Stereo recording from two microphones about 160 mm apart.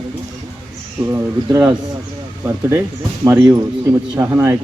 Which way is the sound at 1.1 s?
20° right (ahead or behind).